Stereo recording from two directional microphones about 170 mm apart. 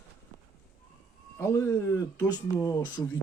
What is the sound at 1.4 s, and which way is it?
Speech, 15° left (ahead or behind).